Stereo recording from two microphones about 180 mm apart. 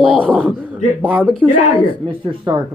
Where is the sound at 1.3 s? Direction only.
30° left (ahead or behind).